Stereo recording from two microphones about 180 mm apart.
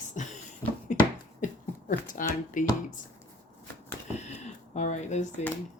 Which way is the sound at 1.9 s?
45° left (ahead or behind).